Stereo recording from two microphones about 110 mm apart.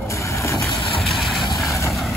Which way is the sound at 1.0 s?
Centre (ahead or behind).